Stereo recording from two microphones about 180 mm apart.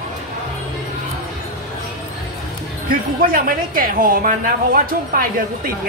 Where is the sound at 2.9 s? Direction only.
50° right (ahead or behind).